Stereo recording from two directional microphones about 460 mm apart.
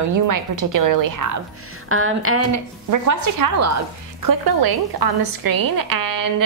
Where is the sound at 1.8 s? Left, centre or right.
Right.